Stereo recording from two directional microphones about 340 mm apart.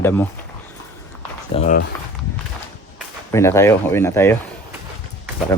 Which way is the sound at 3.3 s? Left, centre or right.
Centre.